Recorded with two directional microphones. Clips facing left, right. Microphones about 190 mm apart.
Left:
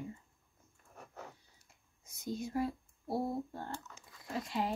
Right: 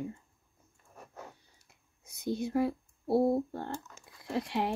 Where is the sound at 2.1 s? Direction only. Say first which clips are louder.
Right 6 dB; 70° right (ahead or behind).